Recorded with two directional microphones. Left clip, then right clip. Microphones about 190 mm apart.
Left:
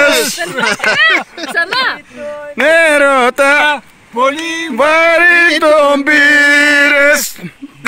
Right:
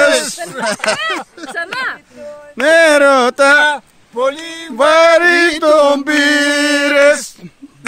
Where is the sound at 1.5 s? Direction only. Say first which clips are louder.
Left 7 dB; 30° right (ahead or behind).